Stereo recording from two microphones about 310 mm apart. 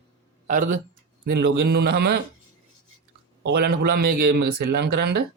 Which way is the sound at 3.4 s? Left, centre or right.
Right.